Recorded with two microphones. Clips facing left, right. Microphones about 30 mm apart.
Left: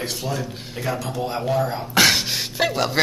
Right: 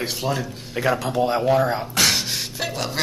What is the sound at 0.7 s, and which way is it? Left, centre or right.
Speech, right.